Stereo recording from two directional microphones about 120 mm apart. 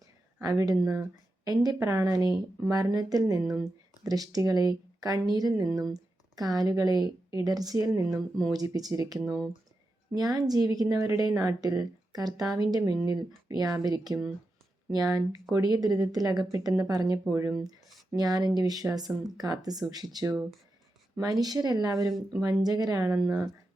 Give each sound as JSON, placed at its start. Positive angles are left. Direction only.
{"t": 0.4, "sound": "a woman's voice", "side_deg": -30}
{"t": 10.2, "sound": "a woman's voice", "side_deg": -35}